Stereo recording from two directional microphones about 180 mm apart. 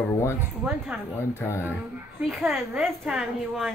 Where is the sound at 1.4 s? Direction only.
15° left (ahead or behind).